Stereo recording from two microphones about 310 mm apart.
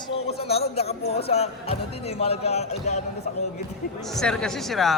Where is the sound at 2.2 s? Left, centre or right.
Centre.